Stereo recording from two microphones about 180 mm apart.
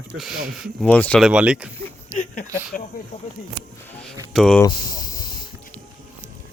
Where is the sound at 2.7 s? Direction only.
50° left (ahead or behind).